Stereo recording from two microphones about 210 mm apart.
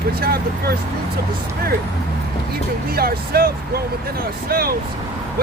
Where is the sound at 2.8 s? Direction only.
45° right (ahead or behind).